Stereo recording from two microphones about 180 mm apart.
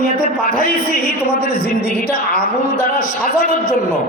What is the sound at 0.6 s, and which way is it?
A man's voice, 50° left (ahead or behind).